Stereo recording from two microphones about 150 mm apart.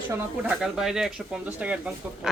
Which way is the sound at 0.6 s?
5° right (ahead or behind).